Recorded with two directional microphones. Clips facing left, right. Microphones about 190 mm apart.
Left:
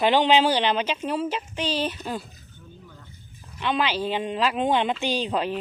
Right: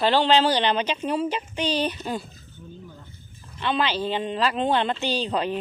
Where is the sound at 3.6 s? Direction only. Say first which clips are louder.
Even; 10° left (ahead or behind).